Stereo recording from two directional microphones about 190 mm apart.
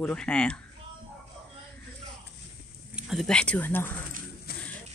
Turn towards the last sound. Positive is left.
turn(degrees=10)  # may be behind; listen again after turning